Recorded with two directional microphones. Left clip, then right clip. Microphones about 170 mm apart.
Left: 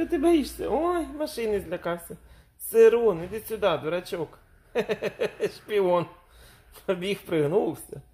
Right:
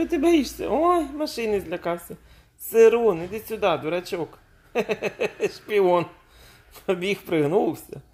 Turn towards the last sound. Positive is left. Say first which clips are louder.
# right 3 dB
turn(degrees=-15)  # may be behind; listen again after turning